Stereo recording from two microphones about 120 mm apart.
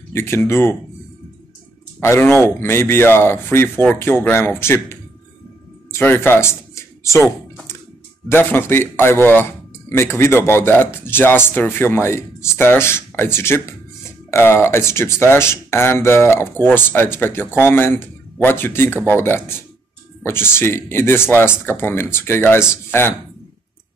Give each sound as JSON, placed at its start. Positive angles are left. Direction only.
{"t": 0.1, "sound": "speech", "side_deg": 20}
{"t": 2.0, "sound": "speech", "side_deg": 20}
{"t": 5.9, "sound": "speech", "side_deg": 20}